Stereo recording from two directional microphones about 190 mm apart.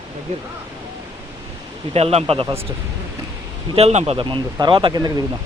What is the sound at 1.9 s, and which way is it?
Speech, 35° right (ahead or behind).